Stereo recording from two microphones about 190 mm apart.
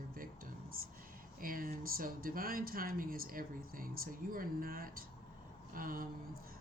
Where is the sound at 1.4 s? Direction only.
50° right (ahead or behind).